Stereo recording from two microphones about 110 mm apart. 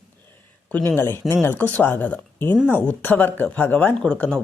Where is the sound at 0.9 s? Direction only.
20° left (ahead or behind).